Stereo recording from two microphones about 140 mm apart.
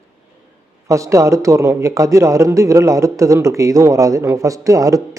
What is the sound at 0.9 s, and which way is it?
A man's voice, 20° right (ahead or behind).